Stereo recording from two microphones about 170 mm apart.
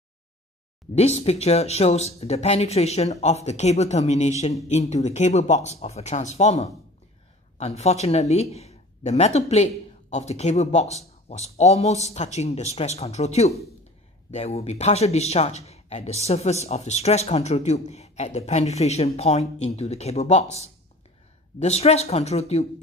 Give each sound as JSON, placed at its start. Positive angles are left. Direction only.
{"t": 0.9, "sound": "speech", "side_deg": 40}